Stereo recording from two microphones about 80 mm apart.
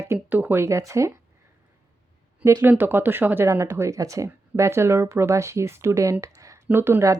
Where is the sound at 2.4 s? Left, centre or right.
Right.